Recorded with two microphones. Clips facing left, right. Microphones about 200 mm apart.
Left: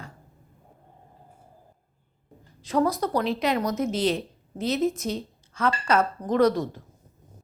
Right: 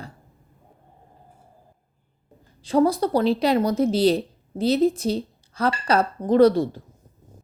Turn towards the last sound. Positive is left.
turn(degrees=-30)  # may be behind; listen again after turning